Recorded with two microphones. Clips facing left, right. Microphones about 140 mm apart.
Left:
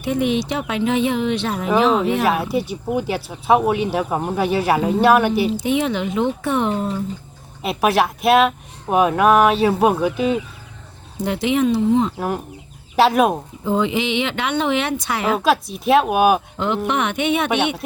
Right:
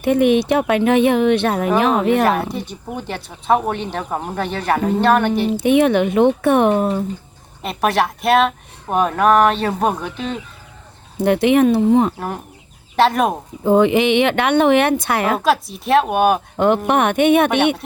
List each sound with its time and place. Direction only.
0.0 s speech: 55° right (ahead or behind)
2.5 s speech: 5° left (ahead or behind)
5.5 s speech: 60° right (ahead or behind)
7.6 s speech: 5° left (ahead or behind)
11.2 s speech: 60° right (ahead or behind)
13.0 s speech: 5° left (ahead or behind)
13.7 s speech: 55° right (ahead or behind)
15.4 s speech: centre (ahead or behind)
16.6 s speech: 55° right (ahead or behind)